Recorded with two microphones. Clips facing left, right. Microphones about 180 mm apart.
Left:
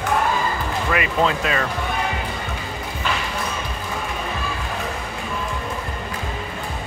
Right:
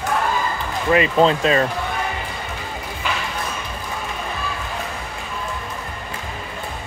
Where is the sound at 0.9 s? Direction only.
30° right (ahead or behind).